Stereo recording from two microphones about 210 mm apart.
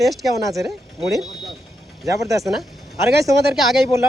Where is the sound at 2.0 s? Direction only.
15° right (ahead or behind).